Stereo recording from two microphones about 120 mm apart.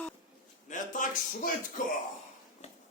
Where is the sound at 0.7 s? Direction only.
90° left.